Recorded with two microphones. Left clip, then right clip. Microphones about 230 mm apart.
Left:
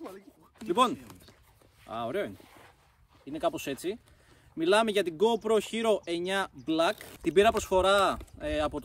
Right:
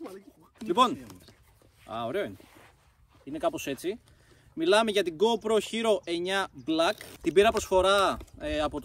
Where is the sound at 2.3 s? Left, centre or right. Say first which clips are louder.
Even; left.